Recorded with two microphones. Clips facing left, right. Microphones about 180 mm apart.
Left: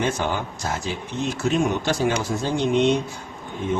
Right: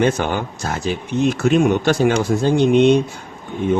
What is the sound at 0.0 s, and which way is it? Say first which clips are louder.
Speech: right 6 dB; 60° right (ahead or behind).